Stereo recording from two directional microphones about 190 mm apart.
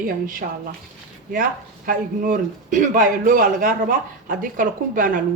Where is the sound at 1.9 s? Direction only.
45° right (ahead or behind).